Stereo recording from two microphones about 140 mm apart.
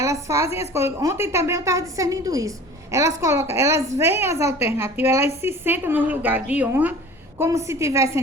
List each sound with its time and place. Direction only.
0.0 s a woman's voice: 20° right (ahead or behind)